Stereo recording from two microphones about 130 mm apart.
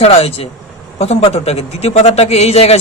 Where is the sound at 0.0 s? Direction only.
50° left (ahead or behind).